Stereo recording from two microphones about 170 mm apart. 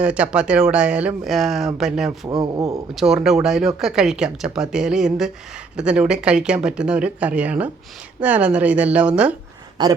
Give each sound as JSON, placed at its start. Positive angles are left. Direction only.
{"t": 0.0, "sound": "speech", "side_deg": -5}
{"t": 2.0, "sound": "a man's voice", "side_deg": -25}
{"t": 2.9, "sound": "a woman's voice", "side_deg": 0}